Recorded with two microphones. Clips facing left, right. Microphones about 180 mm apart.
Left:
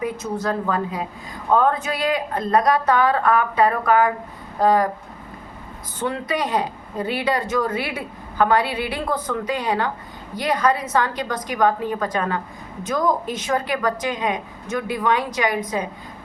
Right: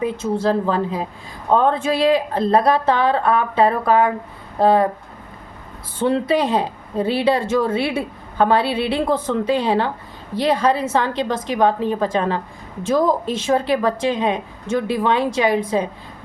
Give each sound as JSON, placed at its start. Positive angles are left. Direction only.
{"t": 0.0, "sound": "speech", "side_deg": -25}
{"t": 6.0, "sound": "speech", "side_deg": -30}